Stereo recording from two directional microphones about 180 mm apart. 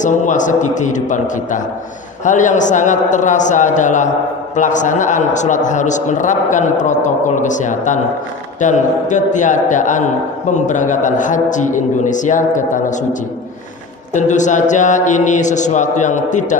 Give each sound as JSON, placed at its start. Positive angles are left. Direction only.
{"t": 0.0, "sound": "speech", "side_deg": 45}
{"t": 14.1, "sound": "speech", "side_deg": 40}